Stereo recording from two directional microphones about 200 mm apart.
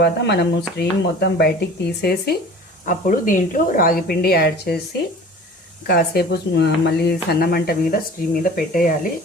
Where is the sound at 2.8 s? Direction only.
40° left (ahead or behind).